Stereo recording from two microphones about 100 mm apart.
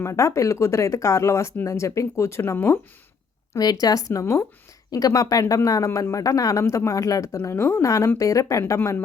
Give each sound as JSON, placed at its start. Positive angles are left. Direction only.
{"t": 0.0, "sound": "speech", "side_deg": 30}
{"t": 3.6, "sound": "speech", "side_deg": 40}